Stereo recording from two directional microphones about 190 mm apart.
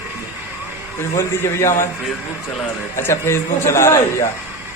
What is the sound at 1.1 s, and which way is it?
Speech, 15° left (ahead or behind).